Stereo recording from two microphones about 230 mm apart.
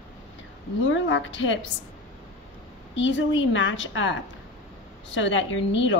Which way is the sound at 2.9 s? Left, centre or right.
Left.